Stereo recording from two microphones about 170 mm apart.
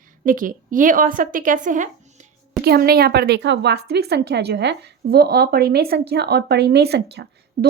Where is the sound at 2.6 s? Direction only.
65° right (ahead or behind).